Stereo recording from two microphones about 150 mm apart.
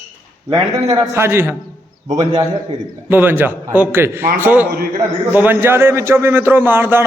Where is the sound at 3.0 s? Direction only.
15° right (ahead or behind).